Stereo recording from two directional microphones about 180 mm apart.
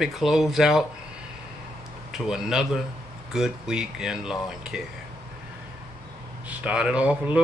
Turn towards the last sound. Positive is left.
turn(degrees=-5)  # may be behind; listen again after turning